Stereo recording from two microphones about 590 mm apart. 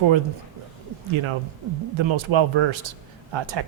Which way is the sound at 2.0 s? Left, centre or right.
Right.